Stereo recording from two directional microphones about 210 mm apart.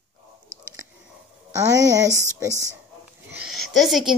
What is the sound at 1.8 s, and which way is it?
Speech, 15° right (ahead or behind).